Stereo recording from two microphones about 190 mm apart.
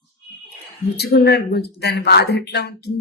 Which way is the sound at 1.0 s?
60° left (ahead or behind).